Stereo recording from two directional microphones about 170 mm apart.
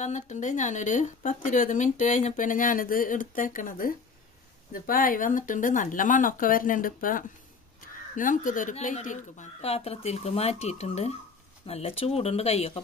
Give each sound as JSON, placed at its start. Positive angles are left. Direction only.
{"t": 0.0, "sound": "speech", "side_deg": 45}